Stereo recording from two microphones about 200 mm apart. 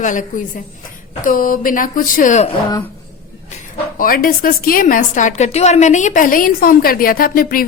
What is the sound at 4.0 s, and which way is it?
A woman's voice, 45° left (ahead or behind).